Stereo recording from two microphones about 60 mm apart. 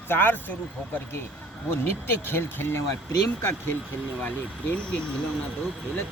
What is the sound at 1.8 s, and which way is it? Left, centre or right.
Speech, left.